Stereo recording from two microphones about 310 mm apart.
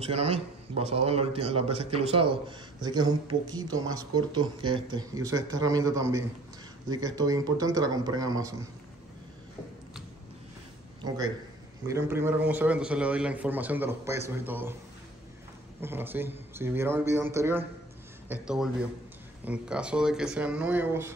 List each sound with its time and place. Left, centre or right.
0.0 s a man's voice: centre
11.0 s a man's voice: centre
15.8 s a man's voice: centre